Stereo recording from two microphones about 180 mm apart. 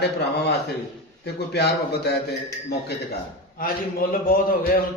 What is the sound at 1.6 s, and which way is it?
Speech, 70° left (ahead or behind).